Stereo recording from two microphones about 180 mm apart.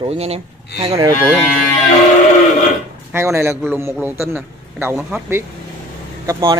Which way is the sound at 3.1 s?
15° right (ahead or behind).